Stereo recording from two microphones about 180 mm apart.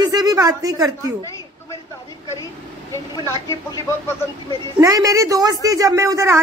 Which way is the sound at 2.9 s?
15° left (ahead or behind).